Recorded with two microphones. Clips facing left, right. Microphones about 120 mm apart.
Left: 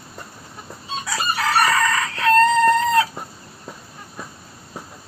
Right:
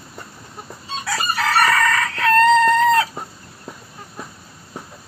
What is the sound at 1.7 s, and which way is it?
Fowl, 20° left (ahead or behind).